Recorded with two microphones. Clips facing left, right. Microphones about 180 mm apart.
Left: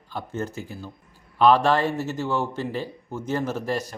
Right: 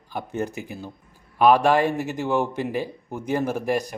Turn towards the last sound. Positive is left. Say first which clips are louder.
# right 3 dB
turn(degrees=-15)  # may be behind; listen again after turning